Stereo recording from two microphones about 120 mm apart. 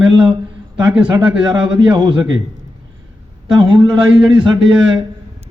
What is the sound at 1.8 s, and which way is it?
Speech, 40° right (ahead or behind).